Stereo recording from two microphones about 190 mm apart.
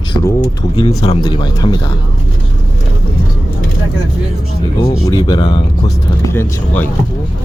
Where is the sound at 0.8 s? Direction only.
35° left (ahead or behind).